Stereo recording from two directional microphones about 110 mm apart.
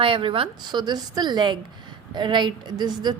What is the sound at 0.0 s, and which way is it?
A woman's voice, 55° right (ahead or behind).